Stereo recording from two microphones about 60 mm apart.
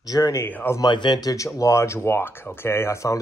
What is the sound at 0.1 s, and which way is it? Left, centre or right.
Speech, left.